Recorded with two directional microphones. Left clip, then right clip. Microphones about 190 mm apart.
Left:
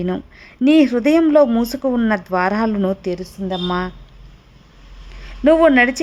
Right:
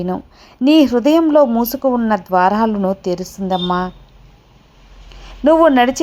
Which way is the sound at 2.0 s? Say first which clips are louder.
Right 6 dB; centre (ahead or behind).